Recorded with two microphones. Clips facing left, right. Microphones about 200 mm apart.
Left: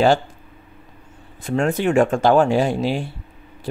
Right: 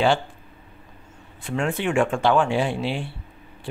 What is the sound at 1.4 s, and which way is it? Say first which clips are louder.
Speech: left 5 dB; 40° left (ahead or behind).